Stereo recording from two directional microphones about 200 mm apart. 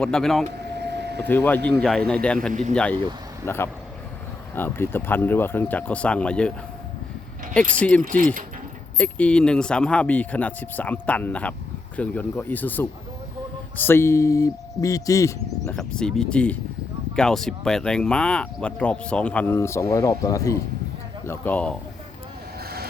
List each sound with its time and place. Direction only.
0.0 s speech: 5° left (ahead or behind)
0.8 s vehicle: 55° right (ahead or behind)
1.2 s speech: 10° left (ahead or behind)
7.7 s speech: 5° left (ahead or behind)
15.7 s speech: 5° left (ahead or behind)